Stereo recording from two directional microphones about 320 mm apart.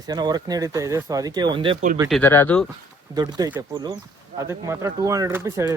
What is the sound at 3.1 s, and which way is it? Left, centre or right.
Speech, centre.